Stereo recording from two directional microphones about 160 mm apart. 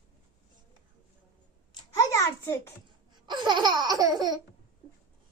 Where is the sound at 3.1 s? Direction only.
25° right (ahead or behind).